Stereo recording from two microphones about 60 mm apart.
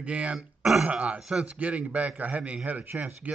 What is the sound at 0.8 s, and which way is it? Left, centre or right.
Speech, right.